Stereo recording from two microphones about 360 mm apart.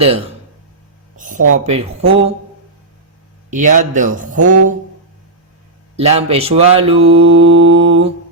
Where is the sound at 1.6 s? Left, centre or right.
Centre.